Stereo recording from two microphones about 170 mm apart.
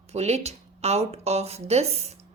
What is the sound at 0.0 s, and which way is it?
Speech, 40° right (ahead or behind).